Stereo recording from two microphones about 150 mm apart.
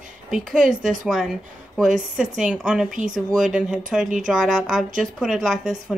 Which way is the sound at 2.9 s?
60° right (ahead or behind).